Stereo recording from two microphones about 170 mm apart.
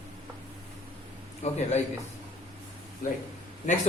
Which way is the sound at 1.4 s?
40° left (ahead or behind).